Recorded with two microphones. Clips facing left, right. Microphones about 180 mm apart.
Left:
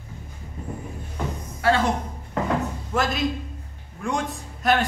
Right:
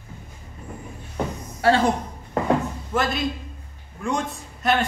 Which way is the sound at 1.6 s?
30° right (ahead or behind).